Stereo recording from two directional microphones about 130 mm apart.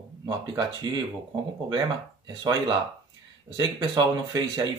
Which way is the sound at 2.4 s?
35° right (ahead or behind).